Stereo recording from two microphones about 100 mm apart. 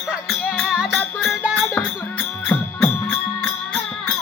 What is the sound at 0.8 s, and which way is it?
Music, centre (ahead or behind).